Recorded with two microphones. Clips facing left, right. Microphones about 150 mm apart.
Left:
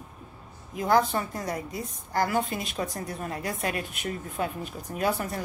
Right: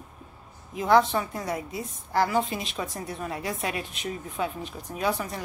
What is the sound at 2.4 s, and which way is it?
Speech, centre (ahead or behind).